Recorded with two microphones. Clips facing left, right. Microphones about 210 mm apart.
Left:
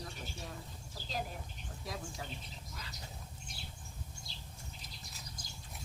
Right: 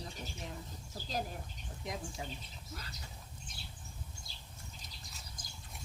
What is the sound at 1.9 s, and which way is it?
Speech, 20° right (ahead or behind).